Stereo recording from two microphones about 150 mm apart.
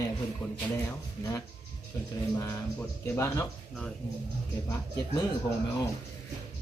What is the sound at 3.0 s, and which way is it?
Speech, 20° left (ahead or behind).